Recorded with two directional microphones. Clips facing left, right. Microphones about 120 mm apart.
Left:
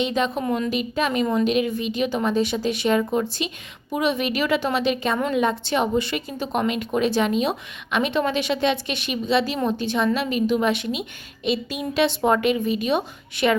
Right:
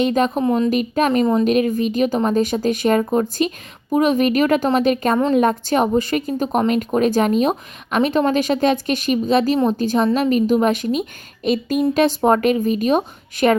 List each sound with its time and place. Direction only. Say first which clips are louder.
0.0 s speech: right 5 dB; 45° right (ahead or behind)
0.4 s a woman's voice: right 6 dB; 30° right (ahead or behind)
0.7 s a woman's voice: right 6 dB; 45° right (ahead or behind)